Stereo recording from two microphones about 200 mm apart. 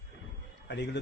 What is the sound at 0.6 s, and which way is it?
Speech, 60° left (ahead or behind).